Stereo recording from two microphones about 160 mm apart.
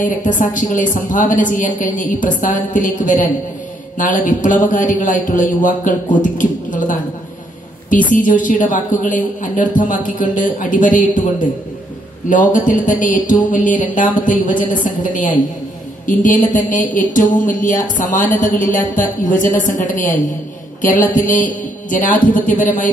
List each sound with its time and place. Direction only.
0.0 s a woman's voice: 55° left (ahead or behind)
6.2 s a sound: 55° left (ahead or behind)
8.1 s a woman's voice: 55° left (ahead or behind)